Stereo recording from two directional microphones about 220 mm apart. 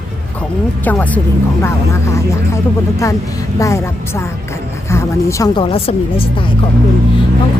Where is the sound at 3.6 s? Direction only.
15° left (ahead or behind).